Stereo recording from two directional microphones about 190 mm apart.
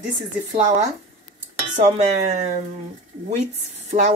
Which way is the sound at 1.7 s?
35° right (ahead or behind).